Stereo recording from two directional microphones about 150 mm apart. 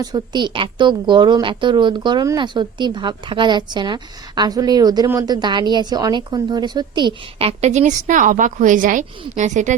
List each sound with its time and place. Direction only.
0.0 s speech: 25° right (ahead or behind); by 9.7 s 55° right (ahead or behind)